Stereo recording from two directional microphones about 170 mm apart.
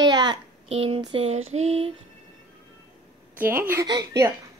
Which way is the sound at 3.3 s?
10° right (ahead or behind).